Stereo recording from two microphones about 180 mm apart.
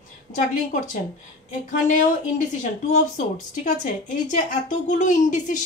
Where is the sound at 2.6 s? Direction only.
45° left (ahead or behind).